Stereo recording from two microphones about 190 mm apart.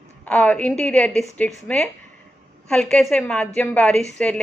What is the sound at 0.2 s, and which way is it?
A woman's voice, 5° left (ahead or behind).